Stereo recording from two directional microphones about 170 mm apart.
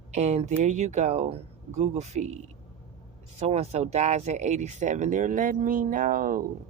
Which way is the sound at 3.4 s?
40° right (ahead or behind).